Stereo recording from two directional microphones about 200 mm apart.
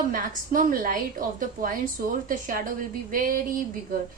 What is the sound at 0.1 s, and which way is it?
Speech, 45° right (ahead or behind).